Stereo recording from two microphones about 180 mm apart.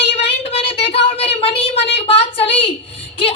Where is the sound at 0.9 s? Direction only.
35° left (ahead or behind).